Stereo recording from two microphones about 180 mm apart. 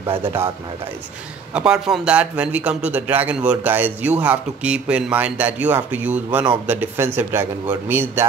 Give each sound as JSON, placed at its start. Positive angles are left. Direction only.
{"t": 1.5, "sound": "speech", "side_deg": -5}